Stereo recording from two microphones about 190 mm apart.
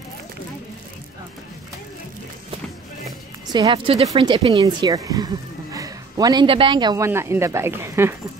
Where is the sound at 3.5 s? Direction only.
25° right (ahead or behind).